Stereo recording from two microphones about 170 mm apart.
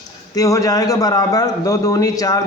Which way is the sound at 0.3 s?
20° left (ahead or behind).